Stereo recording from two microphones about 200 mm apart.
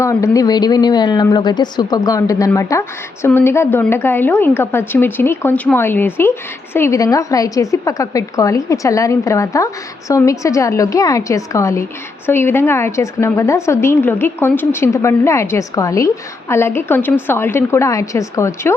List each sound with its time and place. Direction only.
0.0 s a woman's voice: 15° left (ahead or behind)